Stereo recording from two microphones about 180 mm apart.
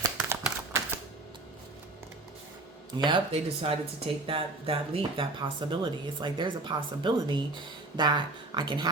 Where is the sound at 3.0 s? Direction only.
30° right (ahead or behind).